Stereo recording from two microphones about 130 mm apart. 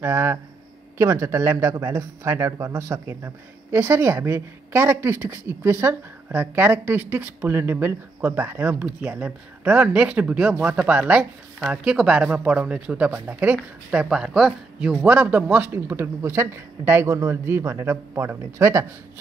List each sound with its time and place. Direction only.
0.0 s a woman's voice: 20° right (ahead or behind)